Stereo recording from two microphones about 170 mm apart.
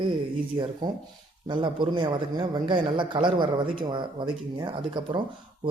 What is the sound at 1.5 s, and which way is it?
A man's voice, 30° right (ahead or behind).